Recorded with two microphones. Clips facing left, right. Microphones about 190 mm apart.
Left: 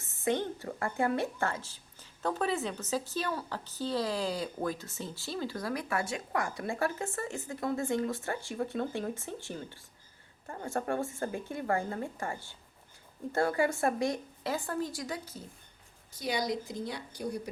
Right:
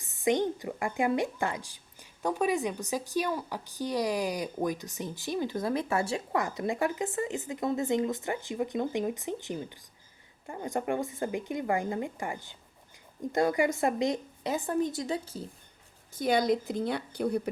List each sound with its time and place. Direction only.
0.0 s a woman's voice: 15° right (ahead or behind)
16.1 s speech: 55° right (ahead or behind)